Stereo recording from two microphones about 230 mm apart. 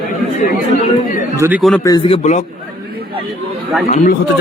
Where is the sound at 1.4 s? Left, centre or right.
Centre.